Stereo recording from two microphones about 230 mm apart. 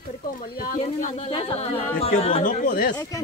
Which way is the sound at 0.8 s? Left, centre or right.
Left.